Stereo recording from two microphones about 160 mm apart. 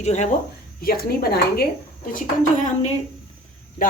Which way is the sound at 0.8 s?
70° left (ahead or behind).